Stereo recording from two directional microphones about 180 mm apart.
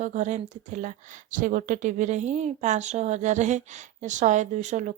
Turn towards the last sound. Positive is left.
turn(degrees=-40)  # may be behind; listen again after turning